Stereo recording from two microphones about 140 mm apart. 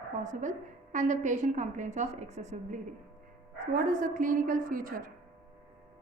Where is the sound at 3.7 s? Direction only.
75° right (ahead or behind).